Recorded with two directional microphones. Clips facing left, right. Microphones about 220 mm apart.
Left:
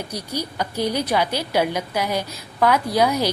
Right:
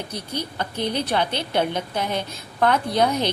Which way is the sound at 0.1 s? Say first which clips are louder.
Left 2 dB; 10° left (ahead or behind).